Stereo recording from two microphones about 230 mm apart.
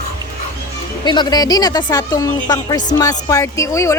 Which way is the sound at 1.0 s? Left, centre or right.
Centre.